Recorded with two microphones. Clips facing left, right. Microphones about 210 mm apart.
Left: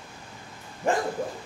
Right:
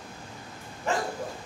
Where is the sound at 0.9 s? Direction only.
50° left (ahead or behind).